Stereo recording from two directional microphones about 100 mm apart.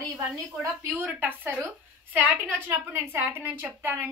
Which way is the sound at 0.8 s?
15° right (ahead or behind).